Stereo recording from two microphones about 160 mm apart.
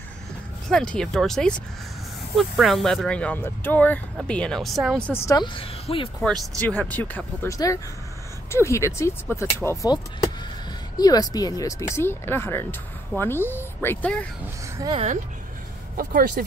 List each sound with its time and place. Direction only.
0.7 s speech: 5° left (ahead or behind)
5.2 s a woman's voice: 25° left (ahead or behind)
6.2 s speech: centre (ahead or behind)
16.0 s speech: 65° right (ahead or behind)